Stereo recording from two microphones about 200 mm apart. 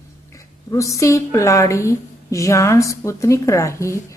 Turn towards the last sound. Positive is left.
turn(degrees=15)  # may be behind; listen again after turning